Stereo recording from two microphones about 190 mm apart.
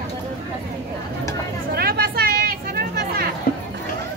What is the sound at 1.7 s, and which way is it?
Vehicle, 55° right (ahead or behind).